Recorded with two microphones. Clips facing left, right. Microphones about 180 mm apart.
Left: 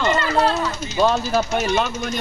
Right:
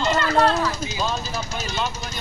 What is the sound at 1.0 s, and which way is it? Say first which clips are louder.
Speech: left 14 dB; 65° left (ahead or behind).